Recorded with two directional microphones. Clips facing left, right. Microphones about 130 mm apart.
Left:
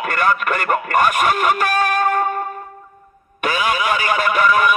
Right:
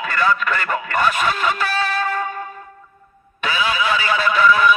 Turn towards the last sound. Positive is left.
turn(degrees=50)  # may be behind; listen again after turning